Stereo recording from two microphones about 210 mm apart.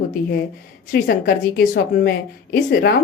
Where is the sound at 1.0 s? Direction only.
45° left (ahead or behind).